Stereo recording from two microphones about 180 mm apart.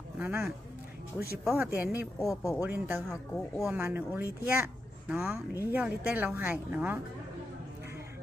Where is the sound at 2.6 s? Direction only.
10° right (ahead or behind).